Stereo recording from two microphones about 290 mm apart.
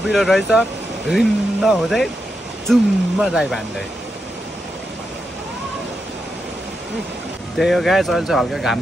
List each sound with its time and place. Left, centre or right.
0.0 s speech: centre
7.5 s speech: centre